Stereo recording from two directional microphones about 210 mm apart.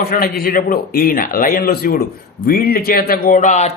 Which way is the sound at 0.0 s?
45° left (ahead or behind).